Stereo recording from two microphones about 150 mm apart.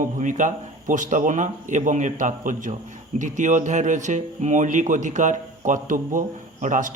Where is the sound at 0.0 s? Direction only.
60° right (ahead or behind).